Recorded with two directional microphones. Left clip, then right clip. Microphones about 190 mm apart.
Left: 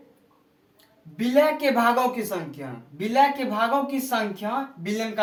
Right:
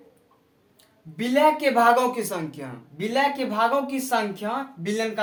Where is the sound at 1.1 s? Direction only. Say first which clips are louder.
Right 1 dB; 25° right (ahead or behind).